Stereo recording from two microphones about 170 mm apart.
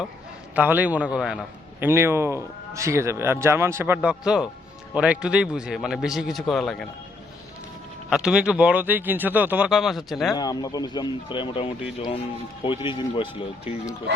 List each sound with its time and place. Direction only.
0.5 s speech: 10° right (ahead or behind)
1.8 s a man's voice: 15° right (ahead or behind); by 6.8 s centre (ahead or behind)
8.1 s speech: 5° right (ahead or behind)
10.3 s speech: 20° left (ahead or behind)